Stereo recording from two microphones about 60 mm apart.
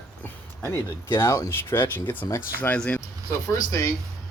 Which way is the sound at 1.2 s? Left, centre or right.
Left.